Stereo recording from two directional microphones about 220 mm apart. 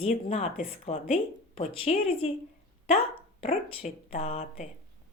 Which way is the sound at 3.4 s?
30° left (ahead or behind).